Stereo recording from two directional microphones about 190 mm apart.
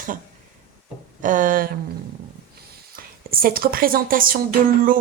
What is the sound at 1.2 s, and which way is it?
Speech, 45° right (ahead or behind).